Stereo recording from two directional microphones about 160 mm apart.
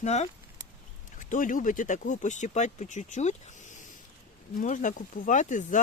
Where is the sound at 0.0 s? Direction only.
45° left (ahead or behind).